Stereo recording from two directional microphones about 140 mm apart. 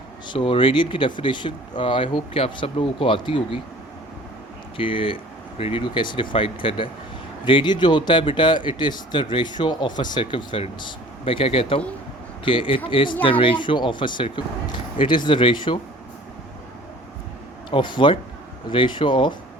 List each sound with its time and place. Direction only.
0.3 s speech: 40° left (ahead or behind)
4.8 s speech: 40° left (ahead or behind)
17.7 s speech: 35° left (ahead or behind)